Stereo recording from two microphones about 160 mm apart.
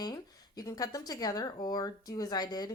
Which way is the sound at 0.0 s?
25° left (ahead or behind).